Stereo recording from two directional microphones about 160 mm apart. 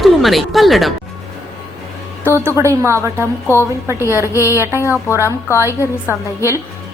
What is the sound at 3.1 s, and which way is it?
Speech, 15° left (ahead or behind).